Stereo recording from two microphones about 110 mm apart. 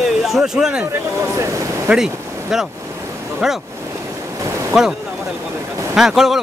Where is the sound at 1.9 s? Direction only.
10° right (ahead or behind).